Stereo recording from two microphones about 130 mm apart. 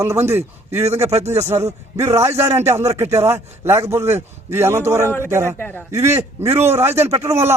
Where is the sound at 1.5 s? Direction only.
25° right (ahead or behind).